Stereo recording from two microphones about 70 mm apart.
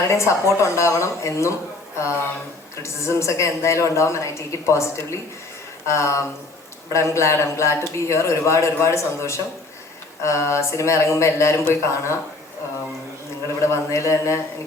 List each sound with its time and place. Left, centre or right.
0.1 s a man's voice: left
2.8 s a man's voice: left
13.6 s a man's voice: left